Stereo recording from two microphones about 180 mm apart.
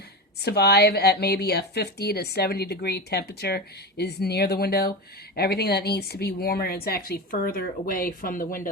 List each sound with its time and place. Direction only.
0.3 s a woman's voice: 65° left (ahead or behind)